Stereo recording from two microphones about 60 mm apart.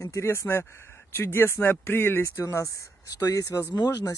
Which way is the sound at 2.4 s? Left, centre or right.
Left.